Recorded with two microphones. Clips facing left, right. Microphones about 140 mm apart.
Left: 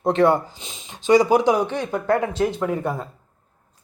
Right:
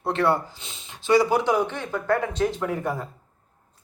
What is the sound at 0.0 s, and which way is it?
Speech, 20° left (ahead or behind).